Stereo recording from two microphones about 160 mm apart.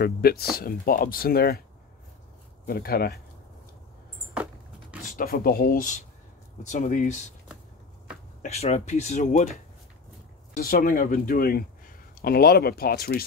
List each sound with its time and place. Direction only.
0.0 s speech: 70° left (ahead or behind)
2.6 s speech: 70° left (ahead or behind)
5.0 s speech: 60° left (ahead or behind)
8.4 s speech: 45° left (ahead or behind)
10.5 s speech: 60° left (ahead or behind)